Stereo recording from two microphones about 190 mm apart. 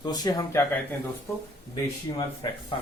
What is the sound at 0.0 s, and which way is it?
Speech, 20° left (ahead or behind).